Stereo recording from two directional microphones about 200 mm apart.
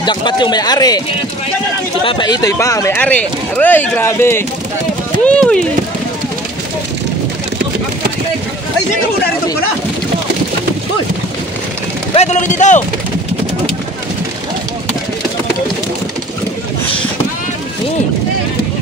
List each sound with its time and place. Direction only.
0.0 s speech: 20° left (ahead or behind)
2.0 s speech: 20° left (ahead or behind); by 5.7 s 5° left (ahead or behind)
12.1 s speech: 35° left (ahead or behind)